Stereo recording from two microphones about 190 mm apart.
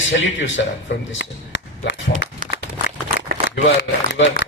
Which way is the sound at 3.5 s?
70° left (ahead or behind).